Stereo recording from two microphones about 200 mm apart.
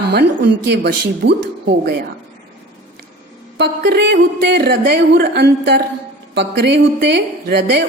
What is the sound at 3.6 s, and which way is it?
A woman's voice, 55° right (ahead or behind).